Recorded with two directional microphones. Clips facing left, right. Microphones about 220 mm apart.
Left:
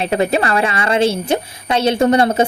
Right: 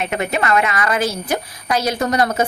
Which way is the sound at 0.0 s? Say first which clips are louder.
Left 5 dB; 30° left (ahead or behind).